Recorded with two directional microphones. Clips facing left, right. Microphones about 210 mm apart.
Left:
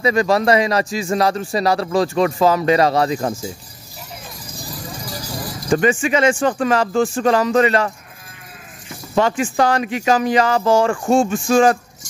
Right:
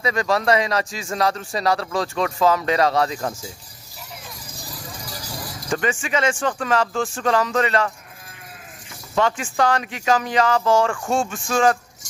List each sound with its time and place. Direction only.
0.0 s speech: 10° left (ahead or behind)
5.7 s speech: 15° left (ahead or behind)
9.2 s speech: 10° left (ahead or behind)